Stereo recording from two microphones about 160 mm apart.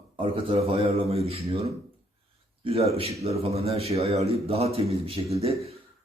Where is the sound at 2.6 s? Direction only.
40° right (ahead or behind).